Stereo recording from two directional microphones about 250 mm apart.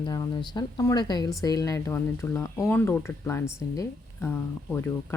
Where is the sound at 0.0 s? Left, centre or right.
Centre.